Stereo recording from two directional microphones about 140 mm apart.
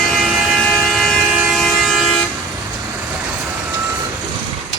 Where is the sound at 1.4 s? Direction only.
5° right (ahead or behind).